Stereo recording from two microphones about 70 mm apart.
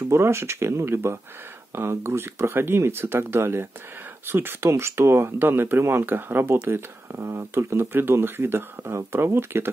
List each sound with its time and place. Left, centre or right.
0.1 s speech: right